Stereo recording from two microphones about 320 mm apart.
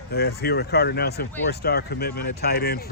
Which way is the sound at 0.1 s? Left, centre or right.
Left.